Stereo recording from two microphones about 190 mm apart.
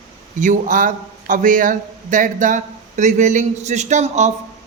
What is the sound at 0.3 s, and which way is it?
A man's voice, 45° right (ahead or behind).